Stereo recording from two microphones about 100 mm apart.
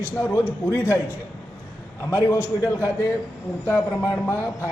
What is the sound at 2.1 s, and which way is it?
Speech, 30° left (ahead or behind).